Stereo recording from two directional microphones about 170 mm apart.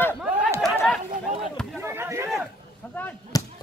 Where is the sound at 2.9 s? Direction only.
10° left (ahead or behind).